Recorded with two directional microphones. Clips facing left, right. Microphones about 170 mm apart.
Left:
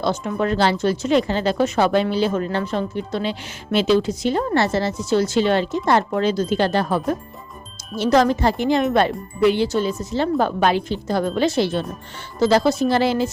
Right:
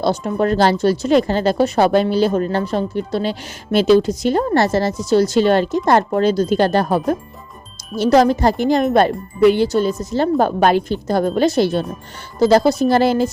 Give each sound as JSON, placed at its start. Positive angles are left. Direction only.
{"t": 0.0, "sound": "speech", "side_deg": -35}